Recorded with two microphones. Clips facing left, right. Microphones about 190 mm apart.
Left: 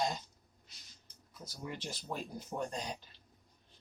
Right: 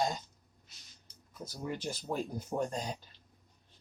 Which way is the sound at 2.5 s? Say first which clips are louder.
Right 5 dB; 45° right (ahead or behind).